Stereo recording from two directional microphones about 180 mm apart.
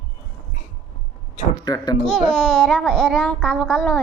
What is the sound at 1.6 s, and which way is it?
Speech, 25° left (ahead or behind).